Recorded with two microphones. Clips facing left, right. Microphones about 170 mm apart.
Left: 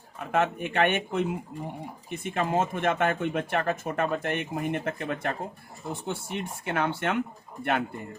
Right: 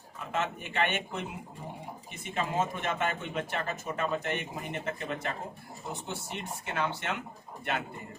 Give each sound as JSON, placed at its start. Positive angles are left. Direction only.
{"t": 0.3, "sound": "speech", "side_deg": 55}